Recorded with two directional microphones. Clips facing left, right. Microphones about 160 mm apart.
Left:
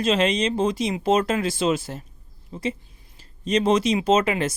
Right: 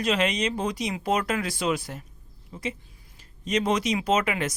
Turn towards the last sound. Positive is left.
turn(degrees=30)  # may be behind; listen again after turning